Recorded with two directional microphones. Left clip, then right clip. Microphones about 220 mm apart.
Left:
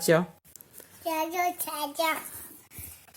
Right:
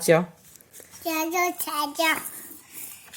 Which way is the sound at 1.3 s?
Centre (ahead or behind).